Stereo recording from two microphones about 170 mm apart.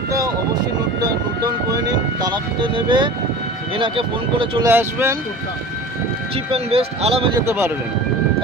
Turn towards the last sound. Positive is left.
turn(degrees=-15)  # may be behind; listen again after turning